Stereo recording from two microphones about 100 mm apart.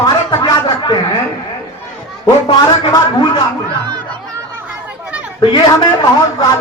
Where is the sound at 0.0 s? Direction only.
35° left (ahead or behind).